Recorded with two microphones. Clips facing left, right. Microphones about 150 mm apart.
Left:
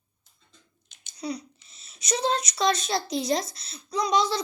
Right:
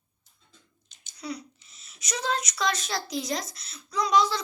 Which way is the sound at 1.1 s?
20° left (ahead or behind).